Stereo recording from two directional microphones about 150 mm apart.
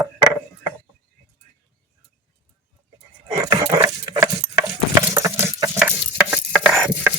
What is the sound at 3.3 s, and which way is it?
Dog, 25° right (ahead or behind).